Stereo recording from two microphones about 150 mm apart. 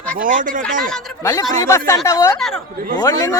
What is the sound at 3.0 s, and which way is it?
Speech, 20° left (ahead or behind).